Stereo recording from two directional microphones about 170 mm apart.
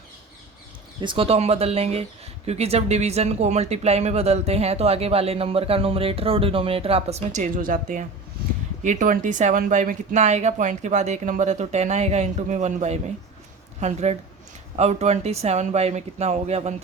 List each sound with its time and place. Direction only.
1.0 s speech: 30° right (ahead or behind)